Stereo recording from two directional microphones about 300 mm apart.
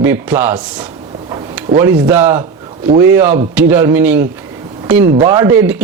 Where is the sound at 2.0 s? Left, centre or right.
Centre.